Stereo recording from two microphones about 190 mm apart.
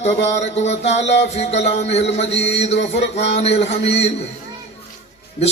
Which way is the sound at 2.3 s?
65° left (ahead or behind).